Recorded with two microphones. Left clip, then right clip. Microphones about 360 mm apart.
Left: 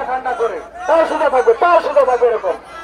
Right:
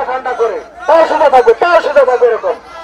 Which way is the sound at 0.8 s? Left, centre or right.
Right.